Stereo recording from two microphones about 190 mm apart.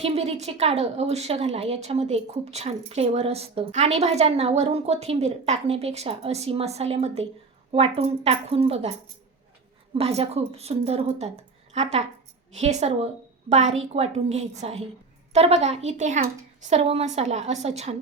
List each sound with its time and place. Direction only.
0.0 s speech: 35° right (ahead or behind)
9.9 s speech: 30° right (ahead or behind)